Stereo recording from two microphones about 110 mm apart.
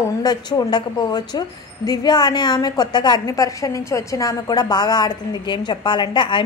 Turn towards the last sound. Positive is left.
turn(degrees=45)  # may be behind; listen again after turning